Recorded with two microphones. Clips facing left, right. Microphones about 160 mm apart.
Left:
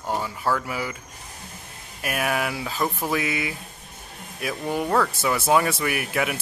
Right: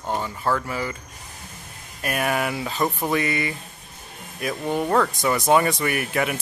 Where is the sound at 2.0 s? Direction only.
Centre (ahead or behind).